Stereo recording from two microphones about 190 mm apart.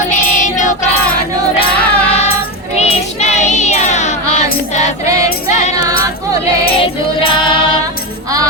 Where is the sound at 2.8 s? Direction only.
35° left (ahead or behind).